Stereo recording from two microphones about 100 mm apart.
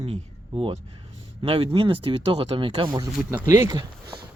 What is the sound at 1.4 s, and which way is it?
Speech, 65° right (ahead or behind).